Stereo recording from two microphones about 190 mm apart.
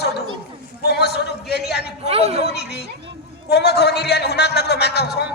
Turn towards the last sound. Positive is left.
turn(degrees=60)  # may be behind; listen again after turning